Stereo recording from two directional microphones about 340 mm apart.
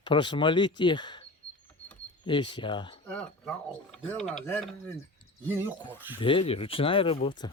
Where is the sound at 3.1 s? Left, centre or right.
Centre.